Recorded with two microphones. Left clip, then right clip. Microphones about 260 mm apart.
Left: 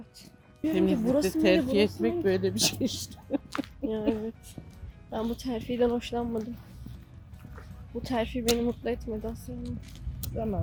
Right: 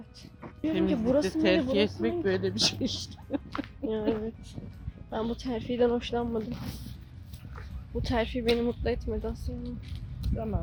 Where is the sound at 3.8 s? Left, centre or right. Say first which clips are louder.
Right 1 dB; centre.